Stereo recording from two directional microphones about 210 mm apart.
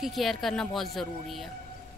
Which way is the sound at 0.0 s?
Centre (ahead or behind).